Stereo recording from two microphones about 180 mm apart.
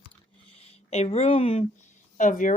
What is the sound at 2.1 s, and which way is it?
Speech, 45° left (ahead or behind).